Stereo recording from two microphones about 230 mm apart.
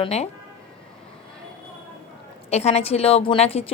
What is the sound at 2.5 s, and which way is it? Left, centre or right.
A woman's voice, left.